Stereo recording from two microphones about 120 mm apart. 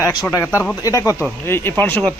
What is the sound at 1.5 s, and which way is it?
Speech, 20° left (ahead or behind).